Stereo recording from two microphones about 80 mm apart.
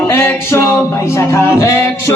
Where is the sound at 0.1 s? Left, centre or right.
Left.